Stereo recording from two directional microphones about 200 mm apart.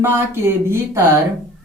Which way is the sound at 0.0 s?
10° right (ahead or behind).